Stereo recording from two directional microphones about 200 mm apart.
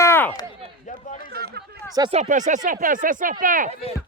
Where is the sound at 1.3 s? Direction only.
55° right (ahead or behind).